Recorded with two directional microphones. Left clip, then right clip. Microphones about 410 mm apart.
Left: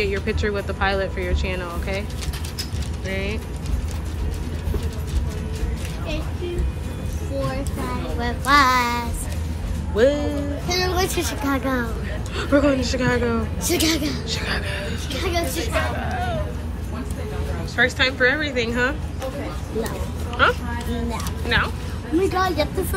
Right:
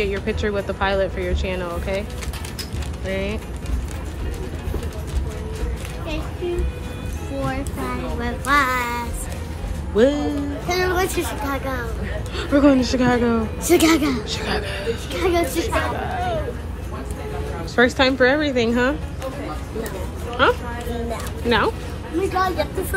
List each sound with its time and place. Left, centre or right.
0.0 s speech: centre
3.1 s speech: centre
8.2 s speech: centre
9.9 s speech: centre
11.4 s speech: left
12.4 s speech: centre
17.7 s speech: centre
20.4 s speech: centre